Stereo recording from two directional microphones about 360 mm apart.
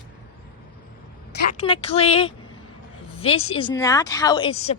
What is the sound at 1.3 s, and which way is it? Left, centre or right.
Speech, centre.